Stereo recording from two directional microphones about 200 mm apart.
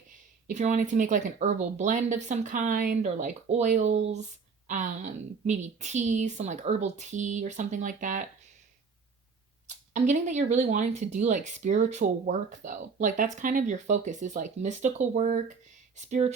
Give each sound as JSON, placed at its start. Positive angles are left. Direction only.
{"t": 0.4, "sound": "speech", "side_deg": -35}
{"t": 9.6, "sound": "speech", "side_deg": -35}